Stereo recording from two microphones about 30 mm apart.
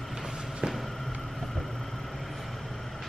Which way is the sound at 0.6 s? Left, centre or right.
Right.